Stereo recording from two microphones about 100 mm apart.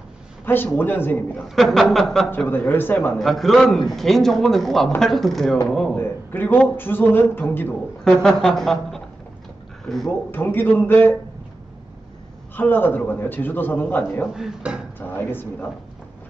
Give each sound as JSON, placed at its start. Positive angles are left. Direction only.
{"t": 0.7, "sound": "a man's voice", "side_deg": 20}
{"t": 1.5, "sound": "speech", "side_deg": 0}
{"t": 2.3, "sound": "a man's voice", "side_deg": 15}
{"t": 3.2, "sound": "speech", "side_deg": 0}
{"t": 5.9, "sound": "a man's voice", "side_deg": 20}
{"t": 8.0, "sound": "speech", "side_deg": 5}
{"t": 10.3, "sound": "a man's voice", "side_deg": 20}
{"t": 12.5, "sound": "a man's voice", "side_deg": 20}
{"t": 14.2, "sound": "speech", "side_deg": -5}
{"t": 15.0, "sound": "a man's voice", "side_deg": 20}